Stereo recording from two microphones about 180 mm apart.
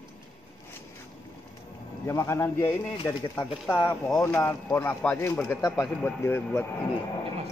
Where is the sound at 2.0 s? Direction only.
15° left (ahead or behind).